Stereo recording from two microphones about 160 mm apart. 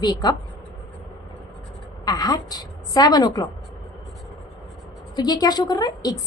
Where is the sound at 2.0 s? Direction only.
25° left (ahead or behind).